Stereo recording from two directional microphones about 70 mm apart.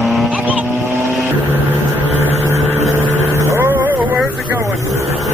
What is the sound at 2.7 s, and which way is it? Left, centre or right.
Vehicle, right.